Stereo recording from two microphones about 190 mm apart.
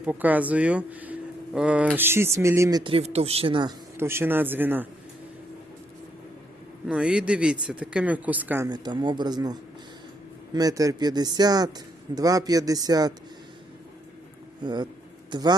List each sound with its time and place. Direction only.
0.0 s speech: 10° right (ahead or behind)
6.8 s speech: 5° right (ahead or behind)
14.6 s a man's voice: 25° right (ahead or behind)